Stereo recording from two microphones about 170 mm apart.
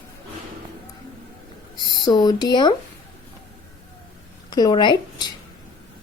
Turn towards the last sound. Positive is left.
turn(degrees=25)  # may be behind; listen again after turning